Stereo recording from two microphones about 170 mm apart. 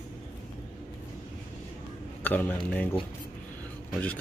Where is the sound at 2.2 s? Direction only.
10° left (ahead or behind).